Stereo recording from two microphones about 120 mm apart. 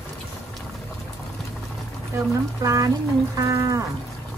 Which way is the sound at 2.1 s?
25° right (ahead or behind).